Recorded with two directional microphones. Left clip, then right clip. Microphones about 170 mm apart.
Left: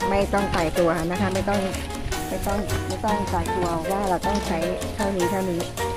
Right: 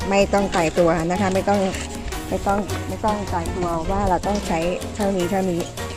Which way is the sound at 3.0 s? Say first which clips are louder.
Right 2 dB; 35° right (ahead or behind).